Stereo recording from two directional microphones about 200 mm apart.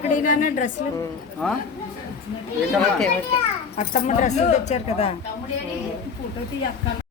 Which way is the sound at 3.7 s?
35° left (ahead or behind).